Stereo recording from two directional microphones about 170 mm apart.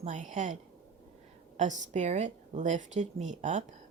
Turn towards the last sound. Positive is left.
turn(degrees=-45)  # may be behind; listen again after turning